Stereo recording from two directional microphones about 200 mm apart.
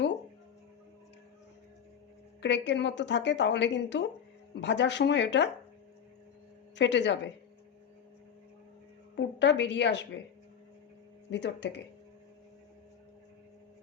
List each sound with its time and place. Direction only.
2.4 s a woman's voice: 60° left (ahead or behind)
6.7 s a woman's voice: 60° left (ahead or behind)
9.1 s a woman's voice: 60° left (ahead or behind)
11.3 s a woman's voice: 60° left (ahead or behind)